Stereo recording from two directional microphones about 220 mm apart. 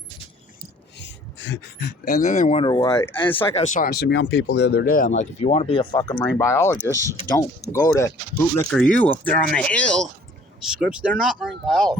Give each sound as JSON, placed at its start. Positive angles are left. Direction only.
{"t": 0.9, "sound": "a sound", "side_deg": 55}
{"t": 2.0, "sound": "speech", "side_deg": 35}
{"t": 3.3, "sound": "speech", "side_deg": 35}